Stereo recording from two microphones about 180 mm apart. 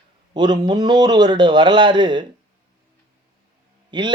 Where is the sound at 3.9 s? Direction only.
25° right (ahead or behind).